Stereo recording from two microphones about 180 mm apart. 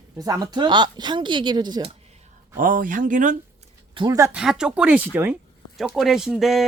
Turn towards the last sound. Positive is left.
turn(degrees=0)  # may be behind; listen again after turning